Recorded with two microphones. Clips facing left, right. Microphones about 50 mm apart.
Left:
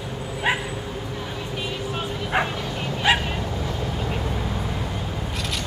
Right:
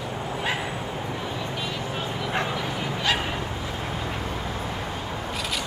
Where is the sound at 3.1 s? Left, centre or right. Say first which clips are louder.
Left 5 dB; left.